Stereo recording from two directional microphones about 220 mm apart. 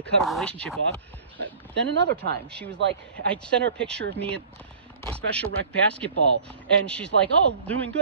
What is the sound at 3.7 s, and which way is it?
Speech, 5° left (ahead or behind).